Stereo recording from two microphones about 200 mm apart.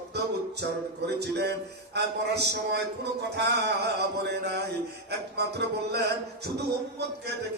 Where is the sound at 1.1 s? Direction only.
55° right (ahead or behind).